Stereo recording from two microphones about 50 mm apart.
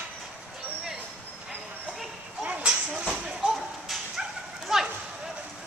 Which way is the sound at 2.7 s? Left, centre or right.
Centre.